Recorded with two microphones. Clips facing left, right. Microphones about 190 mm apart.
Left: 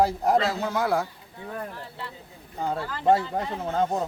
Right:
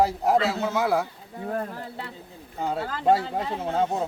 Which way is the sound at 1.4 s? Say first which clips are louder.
Right 5 dB; 45° right (ahead or behind).